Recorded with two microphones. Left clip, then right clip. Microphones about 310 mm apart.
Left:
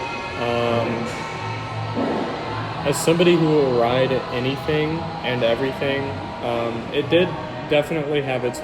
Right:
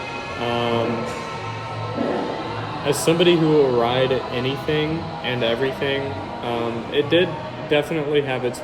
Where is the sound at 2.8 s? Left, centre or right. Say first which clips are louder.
Even; centre.